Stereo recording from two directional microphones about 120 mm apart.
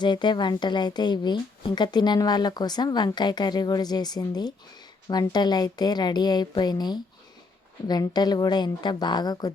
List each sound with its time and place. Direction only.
0.0 s a woman's voice: 40° left (ahead or behind)